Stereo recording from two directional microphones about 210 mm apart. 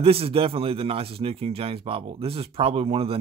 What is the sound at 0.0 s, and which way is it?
A man's voice, 25° right (ahead or behind).